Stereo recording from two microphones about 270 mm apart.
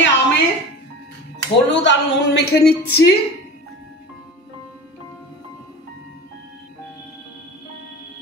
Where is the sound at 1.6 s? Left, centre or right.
Left.